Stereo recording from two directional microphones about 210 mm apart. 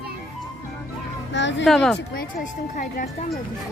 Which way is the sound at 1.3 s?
60° left (ahead or behind).